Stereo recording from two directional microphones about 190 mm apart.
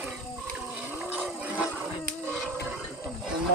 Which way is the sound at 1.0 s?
10° right (ahead or behind).